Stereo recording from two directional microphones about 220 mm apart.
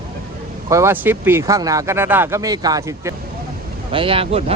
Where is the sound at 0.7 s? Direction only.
15° right (ahead or behind).